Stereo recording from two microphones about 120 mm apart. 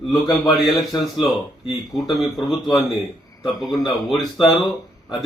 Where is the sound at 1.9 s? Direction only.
Centre (ahead or behind).